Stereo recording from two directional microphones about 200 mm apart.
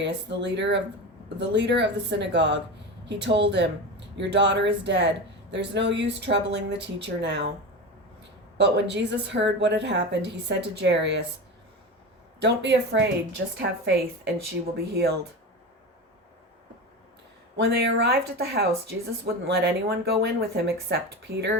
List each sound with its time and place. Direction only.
0.0 s speech: 60° right (ahead or behind)
8.5 s speech: 60° right (ahead or behind)
12.4 s speech: 55° right (ahead or behind)
17.6 s speech: 55° right (ahead or behind)